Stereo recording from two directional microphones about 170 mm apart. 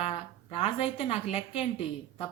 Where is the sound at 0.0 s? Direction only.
35° left (ahead or behind).